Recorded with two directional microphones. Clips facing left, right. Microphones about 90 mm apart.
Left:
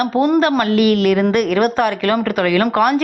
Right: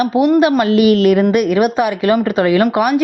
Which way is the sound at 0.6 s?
25° right (ahead or behind).